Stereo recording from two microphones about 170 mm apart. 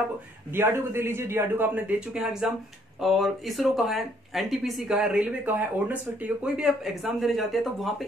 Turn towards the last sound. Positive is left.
turn(degrees=0)  # may be behind; listen again after turning